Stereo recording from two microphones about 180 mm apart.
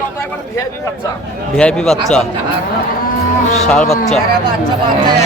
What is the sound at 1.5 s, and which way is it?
Speech, 5° left (ahead or behind).